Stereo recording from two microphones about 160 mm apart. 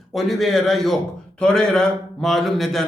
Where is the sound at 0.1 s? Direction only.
Centre (ahead or behind).